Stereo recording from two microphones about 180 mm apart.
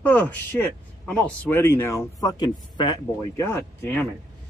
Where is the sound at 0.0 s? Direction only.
10° left (ahead or behind).